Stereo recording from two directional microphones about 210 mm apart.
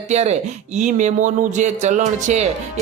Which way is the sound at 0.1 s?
30° right (ahead or behind).